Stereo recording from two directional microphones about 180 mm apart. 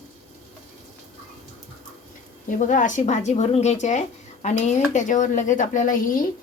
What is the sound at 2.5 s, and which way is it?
A woman's voice, 45° left (ahead or behind).